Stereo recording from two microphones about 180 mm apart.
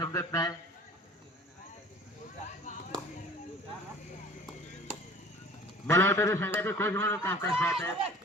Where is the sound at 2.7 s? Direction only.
45° left (ahead or behind).